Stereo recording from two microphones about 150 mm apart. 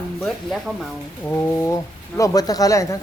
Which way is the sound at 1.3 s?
20° left (ahead or behind).